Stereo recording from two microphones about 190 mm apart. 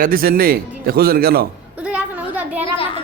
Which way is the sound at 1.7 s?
5° right (ahead or behind).